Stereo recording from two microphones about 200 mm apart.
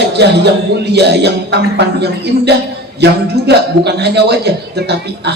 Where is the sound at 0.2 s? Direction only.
55° right (ahead or behind).